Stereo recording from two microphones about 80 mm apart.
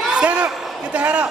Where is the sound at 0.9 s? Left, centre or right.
Centre.